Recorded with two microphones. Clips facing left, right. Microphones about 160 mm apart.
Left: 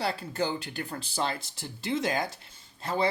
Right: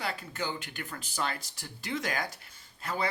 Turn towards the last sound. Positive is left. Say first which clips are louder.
# left 5 dB
turn(degrees=30)  # may be behind; listen again after turning